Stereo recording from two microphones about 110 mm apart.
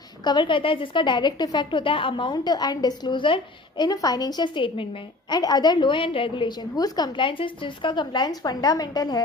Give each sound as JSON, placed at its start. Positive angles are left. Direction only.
{"t": 0.3, "sound": "a woman's voice", "side_deg": 45}
{"t": 3.8, "sound": "a woman's voice", "side_deg": 35}
{"t": 5.3, "sound": "a woman's voice", "side_deg": 35}